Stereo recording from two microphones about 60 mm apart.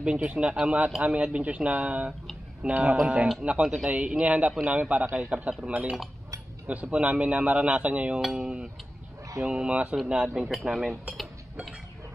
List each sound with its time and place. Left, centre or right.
0.0 s a man's voice: centre
8.2 s a man's voice: centre